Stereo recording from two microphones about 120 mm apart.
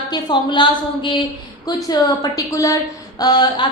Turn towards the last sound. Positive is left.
turn(degrees=35)  # may be behind; listen again after turning